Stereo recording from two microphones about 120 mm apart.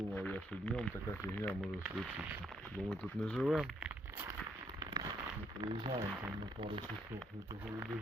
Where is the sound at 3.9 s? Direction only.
20° right (ahead or behind).